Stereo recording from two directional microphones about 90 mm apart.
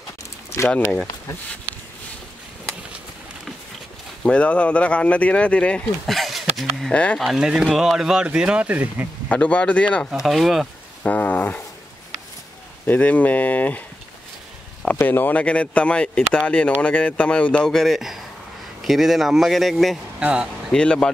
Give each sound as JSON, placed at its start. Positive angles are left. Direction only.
{"t": 4.2, "sound": "speech", "side_deg": 15}
{"t": 6.0, "sound": "a sound", "side_deg": 0}
{"t": 6.9, "sound": "speech", "side_deg": 15}
{"t": 7.2, "sound": "speech", "side_deg": -5}
{"t": 9.3, "sound": "speech", "side_deg": 15}
{"t": 10.1, "sound": "a man's voice", "side_deg": -5}
{"t": 11.1, "sound": "dog", "side_deg": 20}
{"t": 12.8, "sound": "speech", "side_deg": 20}
{"t": 15.0, "sound": "a man's voice", "side_deg": 20}
{"t": 20.2, "sound": "speech", "side_deg": -10}
{"t": 20.7, "sound": "speech", "side_deg": 10}